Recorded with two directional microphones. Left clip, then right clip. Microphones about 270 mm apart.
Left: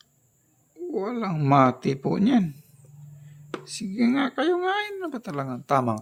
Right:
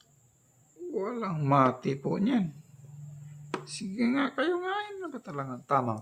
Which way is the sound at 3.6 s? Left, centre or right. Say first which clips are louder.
Left 7 dB; left.